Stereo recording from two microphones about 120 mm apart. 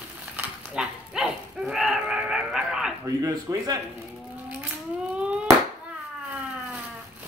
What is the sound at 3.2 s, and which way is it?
Speech, 30° right (ahead or behind).